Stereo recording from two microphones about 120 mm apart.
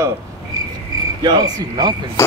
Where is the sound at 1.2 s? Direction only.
35° right (ahead or behind).